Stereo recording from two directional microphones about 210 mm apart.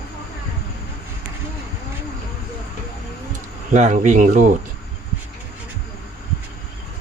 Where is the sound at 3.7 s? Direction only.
35° right (ahead or behind).